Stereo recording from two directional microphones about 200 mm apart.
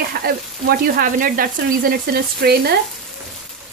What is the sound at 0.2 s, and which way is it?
Frying, 50° right (ahead or behind).